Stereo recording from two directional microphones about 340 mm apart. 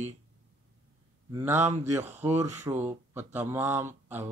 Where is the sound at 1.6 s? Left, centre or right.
Centre.